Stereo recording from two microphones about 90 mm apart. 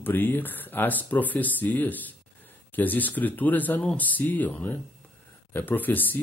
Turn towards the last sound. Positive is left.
turn(degrees=20)  # may be behind; listen again after turning